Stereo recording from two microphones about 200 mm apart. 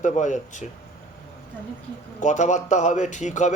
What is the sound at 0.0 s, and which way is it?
Speech, 35° left (ahead or behind).